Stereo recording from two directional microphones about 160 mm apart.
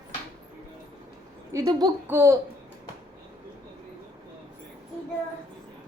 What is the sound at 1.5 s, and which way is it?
Speech, 20° right (ahead or behind).